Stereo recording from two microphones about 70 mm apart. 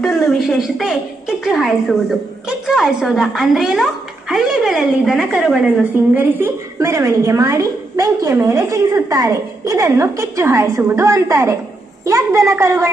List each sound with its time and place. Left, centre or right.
0.0 s a child's voice: centre
6.1 s a woman's voice: right
6.8 s a woman's voice: right
11.1 s a woman's voice: right